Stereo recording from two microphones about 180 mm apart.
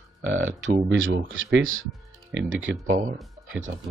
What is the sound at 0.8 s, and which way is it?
Burping, 80° right.